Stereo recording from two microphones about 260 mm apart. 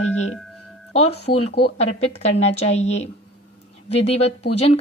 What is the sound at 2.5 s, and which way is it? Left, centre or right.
Speech, left.